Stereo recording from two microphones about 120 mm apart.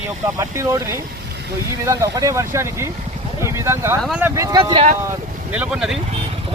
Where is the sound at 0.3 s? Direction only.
25° right (ahead or behind).